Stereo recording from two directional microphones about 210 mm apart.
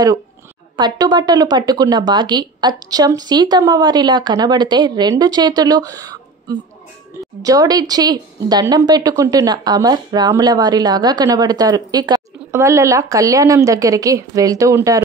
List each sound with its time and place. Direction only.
0.7 s a woman's voice: 20° right (ahead or behind)